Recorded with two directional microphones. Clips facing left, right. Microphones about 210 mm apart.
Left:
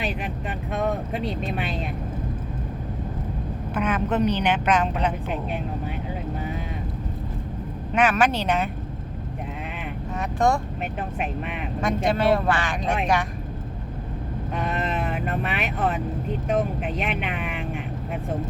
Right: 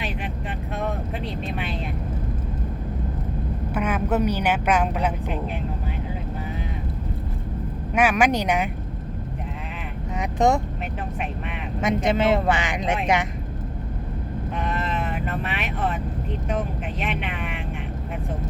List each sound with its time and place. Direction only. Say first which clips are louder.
3.8 s a woman's voice: even; 10° right (ahead or behind)
7.9 s a woman's voice: right 1 dB; 10° right (ahead or behind)
10.2 s speech: right 2 dB; 20° right (ahead or behind)
11.8 s speech: right 1 dB; 20° right (ahead or behind)